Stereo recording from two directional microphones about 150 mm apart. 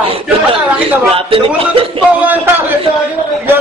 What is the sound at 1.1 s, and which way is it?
Speech, 35° right (ahead or behind).